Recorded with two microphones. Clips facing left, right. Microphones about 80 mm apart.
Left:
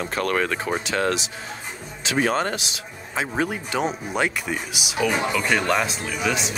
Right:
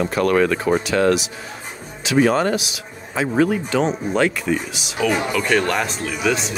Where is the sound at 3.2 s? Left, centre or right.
Centre.